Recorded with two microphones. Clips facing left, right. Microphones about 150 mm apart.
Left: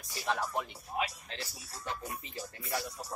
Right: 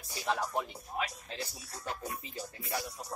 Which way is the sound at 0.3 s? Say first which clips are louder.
Right 1 dB; 5° right (ahead or behind).